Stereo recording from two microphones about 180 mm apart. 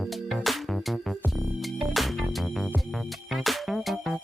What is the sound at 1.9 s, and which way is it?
Music, centre (ahead or behind).